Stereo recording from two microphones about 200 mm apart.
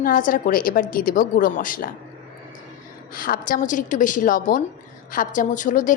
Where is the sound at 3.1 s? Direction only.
45° left (ahead or behind).